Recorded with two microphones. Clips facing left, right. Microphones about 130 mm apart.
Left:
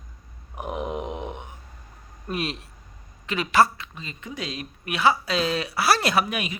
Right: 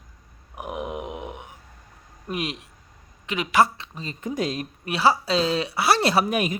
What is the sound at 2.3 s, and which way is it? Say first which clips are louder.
Speech: even; 15° right (ahead or behind).